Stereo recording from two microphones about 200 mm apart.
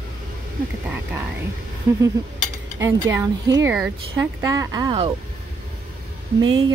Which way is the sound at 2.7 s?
10° right (ahead or behind).